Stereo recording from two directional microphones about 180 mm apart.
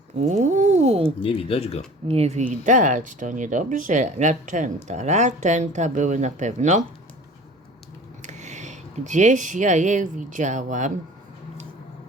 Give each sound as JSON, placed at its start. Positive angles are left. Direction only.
{"t": 0.2, "sound": "a sound", "side_deg": -40}
{"t": 1.2, "sound": "speech", "side_deg": 30}
{"t": 2.0, "sound": "speech", "side_deg": -35}
{"t": 8.2, "sound": "speech", "side_deg": -40}